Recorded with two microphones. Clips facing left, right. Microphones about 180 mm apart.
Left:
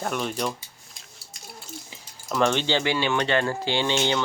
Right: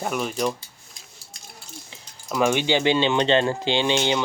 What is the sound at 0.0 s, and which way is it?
Speech, 5° right (ahead or behind).